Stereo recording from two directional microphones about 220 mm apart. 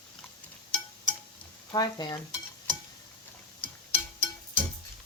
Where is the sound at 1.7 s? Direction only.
20° left (ahead or behind).